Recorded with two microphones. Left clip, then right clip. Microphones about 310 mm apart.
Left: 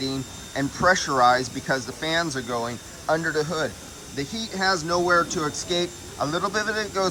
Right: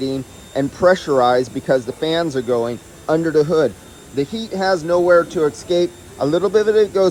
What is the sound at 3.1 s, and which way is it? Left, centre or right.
Speech, right.